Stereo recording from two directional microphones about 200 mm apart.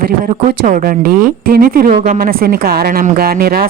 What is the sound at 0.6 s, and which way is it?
A woman's voice, 45° right (ahead or behind).